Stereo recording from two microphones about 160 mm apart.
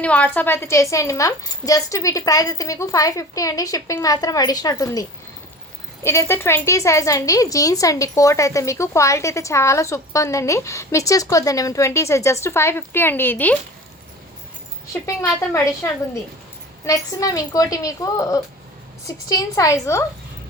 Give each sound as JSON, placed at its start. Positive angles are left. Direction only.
{"t": 0.0, "sound": "a woman's voice", "side_deg": 10}
{"t": 15.0, "sound": "a woman's voice", "side_deg": 15}